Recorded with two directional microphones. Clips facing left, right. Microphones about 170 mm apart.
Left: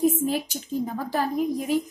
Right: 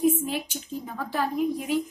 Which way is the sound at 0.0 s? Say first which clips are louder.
Left 2 dB; 40° left (ahead or behind).